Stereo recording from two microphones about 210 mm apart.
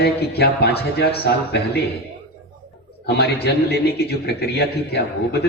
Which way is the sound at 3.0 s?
50° left (ahead or behind).